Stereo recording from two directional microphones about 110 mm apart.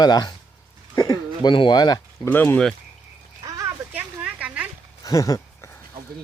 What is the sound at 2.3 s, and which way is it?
Speech, 15° left (ahead or behind).